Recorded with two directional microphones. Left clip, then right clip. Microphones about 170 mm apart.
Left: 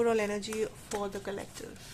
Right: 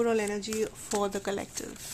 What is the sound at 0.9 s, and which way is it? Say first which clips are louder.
Speech: right 5 dB; 40° right (ahead or behind).